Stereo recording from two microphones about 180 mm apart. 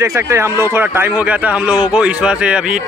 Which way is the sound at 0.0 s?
15° right (ahead or behind).